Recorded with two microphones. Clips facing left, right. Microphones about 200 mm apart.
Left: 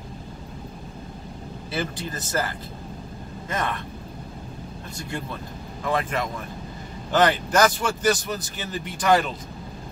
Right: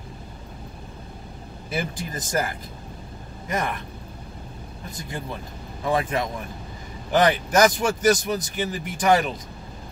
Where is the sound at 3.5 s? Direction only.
10° right (ahead or behind).